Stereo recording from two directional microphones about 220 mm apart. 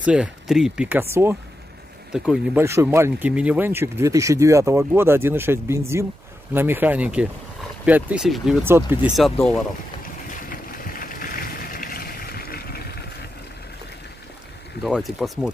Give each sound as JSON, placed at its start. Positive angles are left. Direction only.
{"t": 0.0, "sound": "speech", "side_deg": -5}
{"t": 2.1, "sound": "speech", "side_deg": -5}
{"t": 10.5, "sound": "boat", "side_deg": 40}
{"t": 14.8, "sound": "speech", "side_deg": 0}